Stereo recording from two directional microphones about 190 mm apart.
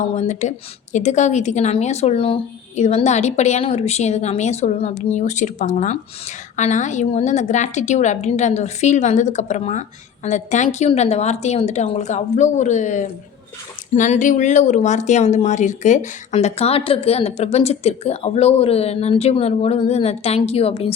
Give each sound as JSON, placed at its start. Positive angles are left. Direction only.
{"t": 0.1, "sound": "speech", "side_deg": 40}